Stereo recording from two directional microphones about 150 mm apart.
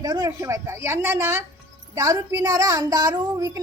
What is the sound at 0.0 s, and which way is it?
A woman's voice, 25° right (ahead or behind).